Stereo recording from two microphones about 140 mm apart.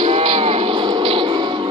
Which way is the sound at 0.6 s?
30° right (ahead or behind).